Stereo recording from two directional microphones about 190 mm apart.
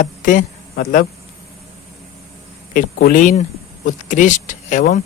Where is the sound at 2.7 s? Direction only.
45° left (ahead or behind).